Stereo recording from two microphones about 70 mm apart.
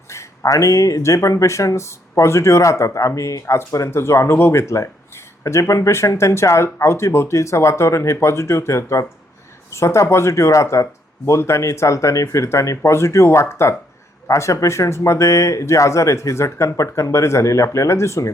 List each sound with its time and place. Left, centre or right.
0.4 s speech: left